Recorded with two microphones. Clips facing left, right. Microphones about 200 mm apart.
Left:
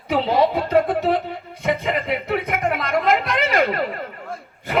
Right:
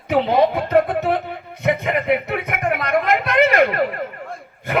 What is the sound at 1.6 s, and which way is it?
Speech, 55° right (ahead or behind).